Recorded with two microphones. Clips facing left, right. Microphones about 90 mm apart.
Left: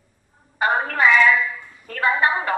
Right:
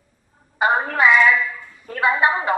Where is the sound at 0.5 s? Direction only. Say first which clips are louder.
Right 2 dB; 15° right (ahead or behind).